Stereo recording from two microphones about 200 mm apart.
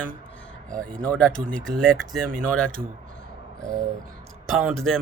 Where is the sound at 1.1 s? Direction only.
5° left (ahead or behind).